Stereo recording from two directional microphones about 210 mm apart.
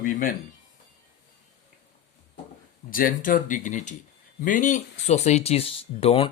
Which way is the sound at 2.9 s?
40° left (ahead or behind).